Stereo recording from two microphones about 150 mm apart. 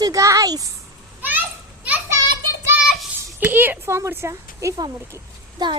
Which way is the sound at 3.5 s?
15° right (ahead or behind).